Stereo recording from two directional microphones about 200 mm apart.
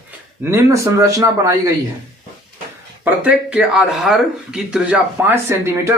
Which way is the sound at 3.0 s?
5° right (ahead or behind).